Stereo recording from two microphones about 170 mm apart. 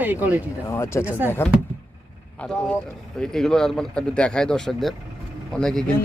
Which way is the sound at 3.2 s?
5° left (ahead or behind).